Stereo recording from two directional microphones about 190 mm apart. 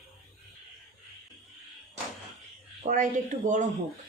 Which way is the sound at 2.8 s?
40° right (ahead or behind).